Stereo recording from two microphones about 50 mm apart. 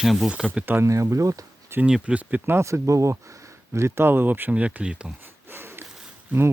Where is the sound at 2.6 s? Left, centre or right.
Right.